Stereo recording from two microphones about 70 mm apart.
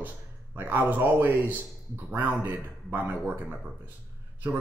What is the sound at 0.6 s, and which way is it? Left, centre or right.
Speech, right.